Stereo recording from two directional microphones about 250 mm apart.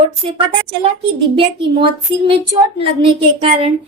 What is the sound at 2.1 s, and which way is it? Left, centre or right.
Speech, right.